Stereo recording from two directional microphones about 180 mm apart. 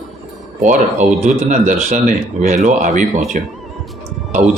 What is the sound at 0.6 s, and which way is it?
Speech, 40° right (ahead or behind).